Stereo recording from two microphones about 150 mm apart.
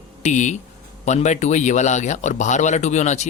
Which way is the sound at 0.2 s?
50° left (ahead or behind).